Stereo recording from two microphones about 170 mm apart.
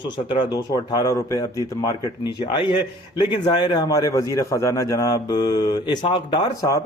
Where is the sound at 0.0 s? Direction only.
25° left (ahead or behind).